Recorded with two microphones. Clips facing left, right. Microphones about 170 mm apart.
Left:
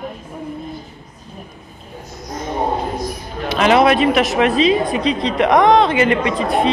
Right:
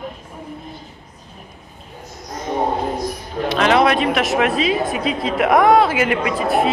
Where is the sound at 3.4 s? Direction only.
5° left (ahead or behind).